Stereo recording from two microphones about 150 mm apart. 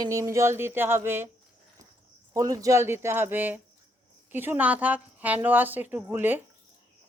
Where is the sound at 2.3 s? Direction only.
20° right (ahead or behind).